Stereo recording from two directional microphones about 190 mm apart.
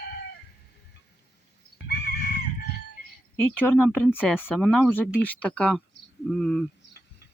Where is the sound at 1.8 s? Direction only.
55° left (ahead or behind).